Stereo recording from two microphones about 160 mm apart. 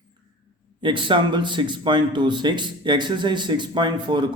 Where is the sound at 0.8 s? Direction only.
30° right (ahead or behind).